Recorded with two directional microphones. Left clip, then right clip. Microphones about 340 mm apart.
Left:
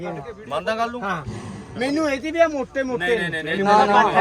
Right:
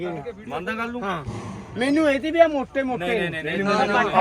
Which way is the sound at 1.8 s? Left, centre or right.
Centre.